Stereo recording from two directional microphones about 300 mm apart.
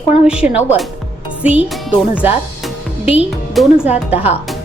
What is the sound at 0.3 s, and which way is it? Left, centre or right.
A child's voice, centre.